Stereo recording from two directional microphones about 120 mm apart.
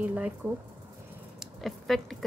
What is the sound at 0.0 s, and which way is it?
Speech, 10° right (ahead or behind).